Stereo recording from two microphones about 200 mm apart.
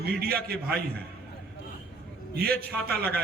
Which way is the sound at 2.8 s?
50° right (ahead or behind).